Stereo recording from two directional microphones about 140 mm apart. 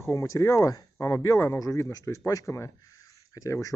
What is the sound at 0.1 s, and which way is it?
Speech, 20° left (ahead or behind).